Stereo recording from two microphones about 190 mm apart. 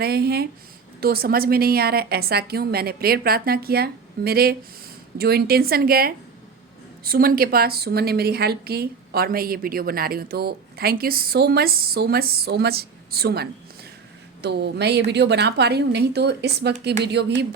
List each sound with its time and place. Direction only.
0.0 s a woman's voice: 55° right (ahead or behind)